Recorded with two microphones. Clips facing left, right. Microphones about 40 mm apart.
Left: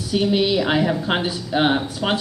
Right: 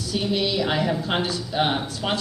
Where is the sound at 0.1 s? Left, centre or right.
Centre.